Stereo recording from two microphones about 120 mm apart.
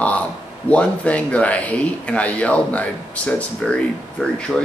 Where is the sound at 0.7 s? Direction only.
10° left (ahead or behind).